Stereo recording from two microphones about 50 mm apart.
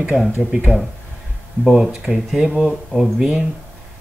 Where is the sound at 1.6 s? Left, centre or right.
Centre.